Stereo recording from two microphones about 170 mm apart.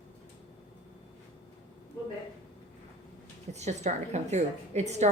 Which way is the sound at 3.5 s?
40° right (ahead or behind).